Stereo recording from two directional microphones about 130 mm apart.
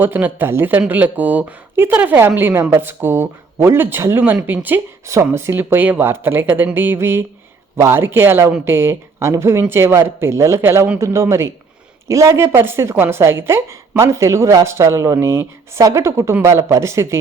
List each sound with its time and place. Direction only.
0.0 s a woman's voice: 15° right (ahead or behind)